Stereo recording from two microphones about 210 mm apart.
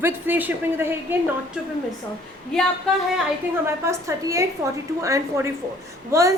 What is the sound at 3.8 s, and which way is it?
A woman's voice, 15° right (ahead or behind).